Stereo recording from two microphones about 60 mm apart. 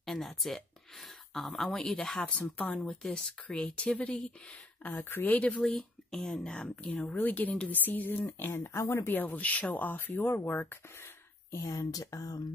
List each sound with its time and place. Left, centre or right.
0.0 s speech: centre
2.7 s speech: centre
4.8 s speech: left
5.8 s speech: centre
6.9 s speech: left
8.8 s speech: left
11.5 s speech: left
11.9 s speech: left